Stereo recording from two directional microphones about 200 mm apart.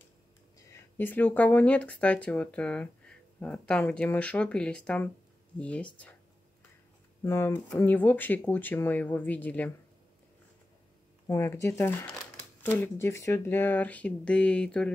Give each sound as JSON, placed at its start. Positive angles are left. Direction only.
{"t": 0.6, "sound": "speech", "side_deg": 10}
{"t": 7.2, "sound": "speech", "side_deg": 10}
{"t": 11.2, "sound": "speech", "side_deg": 15}